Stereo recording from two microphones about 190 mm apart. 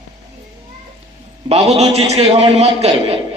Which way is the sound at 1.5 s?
35° right (ahead or behind).